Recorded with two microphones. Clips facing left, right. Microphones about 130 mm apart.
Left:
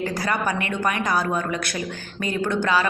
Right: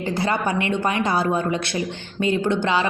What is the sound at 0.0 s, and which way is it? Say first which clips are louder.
Speech: right 2 dB; 25° right (ahead or behind).